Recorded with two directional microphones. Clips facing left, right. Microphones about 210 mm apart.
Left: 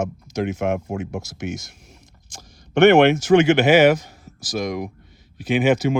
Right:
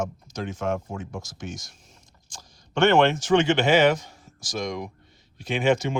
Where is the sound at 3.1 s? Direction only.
5° left (ahead or behind).